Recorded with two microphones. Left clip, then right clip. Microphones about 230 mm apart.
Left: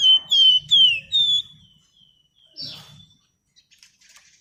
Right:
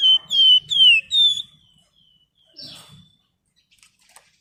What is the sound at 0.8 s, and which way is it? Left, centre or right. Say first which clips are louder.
Alarm: right 3 dB; centre.